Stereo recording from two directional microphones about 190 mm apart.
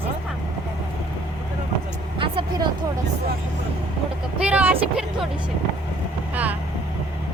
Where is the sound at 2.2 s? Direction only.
25° right (ahead or behind).